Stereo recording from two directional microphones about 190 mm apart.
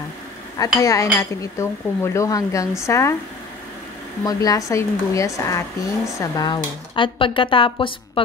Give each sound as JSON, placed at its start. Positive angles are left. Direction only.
{"t": 0.6, "sound": "speech", "side_deg": 15}
{"t": 4.2, "sound": "speech", "side_deg": 20}